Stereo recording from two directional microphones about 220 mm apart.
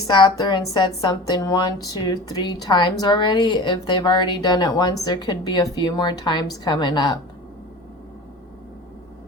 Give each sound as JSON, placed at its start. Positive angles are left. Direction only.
{"t": 0.1, "sound": "a woman's voice", "side_deg": 20}